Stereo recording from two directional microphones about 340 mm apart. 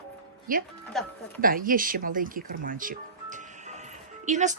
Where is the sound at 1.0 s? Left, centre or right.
Centre.